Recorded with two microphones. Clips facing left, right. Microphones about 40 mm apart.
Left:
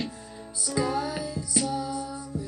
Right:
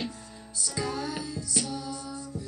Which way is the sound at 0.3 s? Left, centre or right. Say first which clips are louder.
Left 5 dB; centre.